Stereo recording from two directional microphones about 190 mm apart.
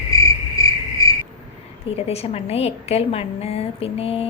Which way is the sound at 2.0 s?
30° left (ahead or behind).